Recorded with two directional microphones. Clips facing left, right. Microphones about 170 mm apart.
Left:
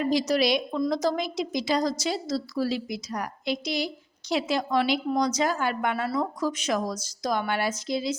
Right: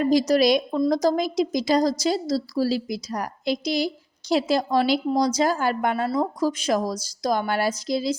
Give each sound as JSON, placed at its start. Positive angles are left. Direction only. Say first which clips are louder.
{"t": 0.0, "sound": "a woman's voice", "louder": "right 5 dB", "side_deg": -40}